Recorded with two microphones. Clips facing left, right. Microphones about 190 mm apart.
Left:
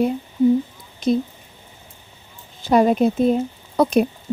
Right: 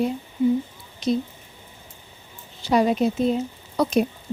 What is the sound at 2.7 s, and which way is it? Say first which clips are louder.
Speech: left 4 dB; 50° left (ahead or behind).